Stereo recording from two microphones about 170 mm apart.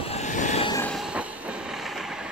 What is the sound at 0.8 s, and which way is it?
Train, centre (ahead or behind).